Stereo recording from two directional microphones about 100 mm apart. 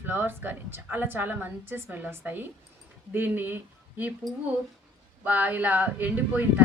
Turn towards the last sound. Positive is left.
turn(degrees=-20)  # may be behind; listen again after turning